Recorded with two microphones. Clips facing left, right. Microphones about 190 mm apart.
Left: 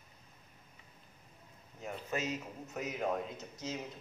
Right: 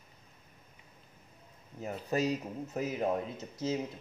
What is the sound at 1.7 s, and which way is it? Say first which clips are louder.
Speech: right 6 dB; 35° right (ahead or behind).